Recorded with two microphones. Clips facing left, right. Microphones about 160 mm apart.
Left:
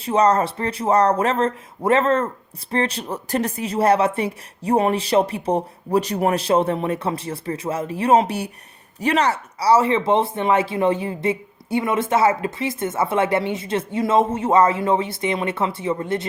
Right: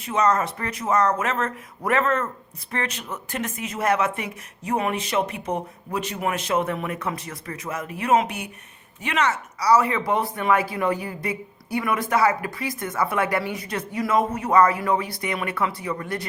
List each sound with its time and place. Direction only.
0.0 s speech: 30° left (ahead or behind)